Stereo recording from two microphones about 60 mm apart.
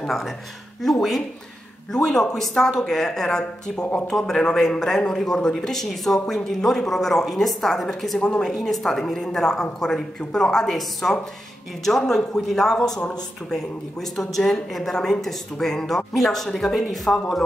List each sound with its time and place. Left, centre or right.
0.0 s speech: centre
1.9 s a woman's voice: centre
8.2 s a woman's voice: centre
8.5 s a woman's voice: centre
14.1 s speech: centre